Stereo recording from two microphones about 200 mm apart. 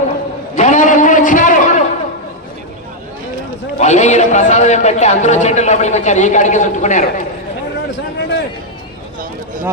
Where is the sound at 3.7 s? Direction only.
35° left (ahead or behind).